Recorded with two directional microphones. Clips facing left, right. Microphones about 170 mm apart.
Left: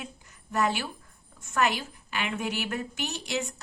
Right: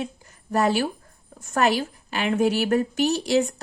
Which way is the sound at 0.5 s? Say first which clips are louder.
Right 7 dB; 35° right (ahead or behind).